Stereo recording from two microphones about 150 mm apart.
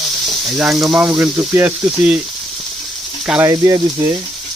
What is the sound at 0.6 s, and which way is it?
Speech, centre (ahead or behind).